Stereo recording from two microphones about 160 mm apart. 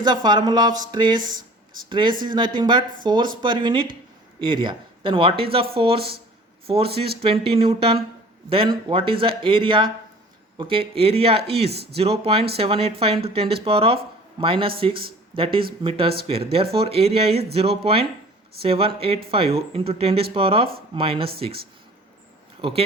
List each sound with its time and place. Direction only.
0.0 s speech: 25° right (ahead or behind)
1.2 s a sound: 55° right (ahead or behind)
1.9 s speech: 30° right (ahead or behind)
11.7 s speech: 85° right
11.9 s speech: 40° right (ahead or behind)